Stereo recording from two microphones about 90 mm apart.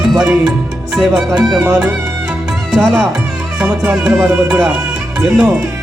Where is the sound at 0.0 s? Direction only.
5° right (ahead or behind).